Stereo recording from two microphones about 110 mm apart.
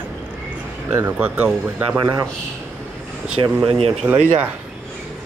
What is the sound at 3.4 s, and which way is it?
Speech, 55° right (ahead or behind).